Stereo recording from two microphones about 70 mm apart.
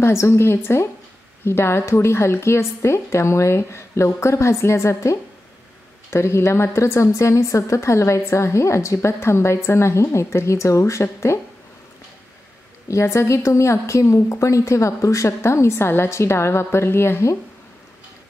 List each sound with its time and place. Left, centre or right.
0.0 s a woman's voice: left
12.8 s a woman's voice: left